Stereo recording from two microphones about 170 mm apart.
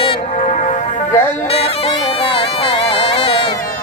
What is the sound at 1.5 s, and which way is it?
Bagpipes, 35° left (ahead or behind).